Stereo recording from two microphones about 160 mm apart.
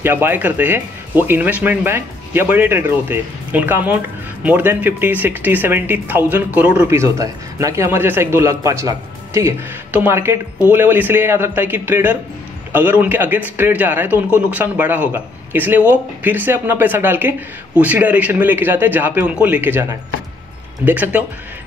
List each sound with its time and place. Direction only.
0.0 s speech: 15° right (ahead or behind)